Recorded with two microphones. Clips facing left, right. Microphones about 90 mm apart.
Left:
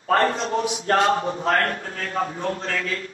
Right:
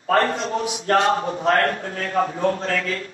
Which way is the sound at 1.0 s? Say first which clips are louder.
Right 1 dB; 30° right (ahead or behind).